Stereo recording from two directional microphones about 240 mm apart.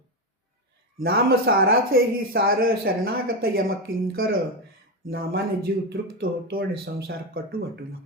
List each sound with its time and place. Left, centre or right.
1.0 s speech: right